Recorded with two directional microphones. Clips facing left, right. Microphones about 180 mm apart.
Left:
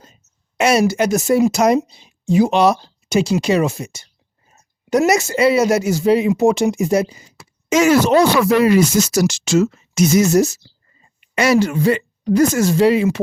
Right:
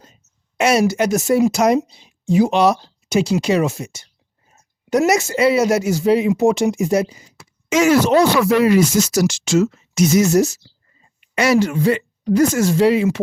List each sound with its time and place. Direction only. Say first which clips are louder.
0.5 s speech: left 1 dB; 30° left (ahead or behind)
7.7 s speech: left 1 dB; 40° left (ahead or behind)